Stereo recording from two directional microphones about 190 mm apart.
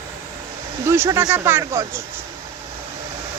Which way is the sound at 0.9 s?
15° right (ahead or behind).